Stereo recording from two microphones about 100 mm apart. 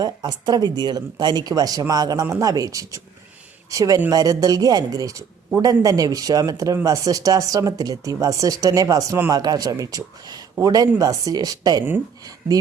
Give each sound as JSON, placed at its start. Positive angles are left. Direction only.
{"t": 0.0, "sound": "speech", "side_deg": -45}